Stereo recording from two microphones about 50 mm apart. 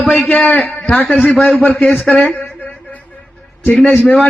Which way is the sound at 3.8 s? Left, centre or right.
Left.